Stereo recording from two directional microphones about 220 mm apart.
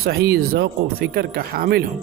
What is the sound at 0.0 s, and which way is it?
A man's voice, 45° right (ahead or behind).